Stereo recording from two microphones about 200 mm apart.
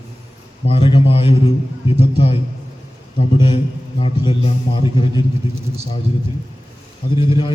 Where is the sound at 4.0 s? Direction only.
25° left (ahead or behind).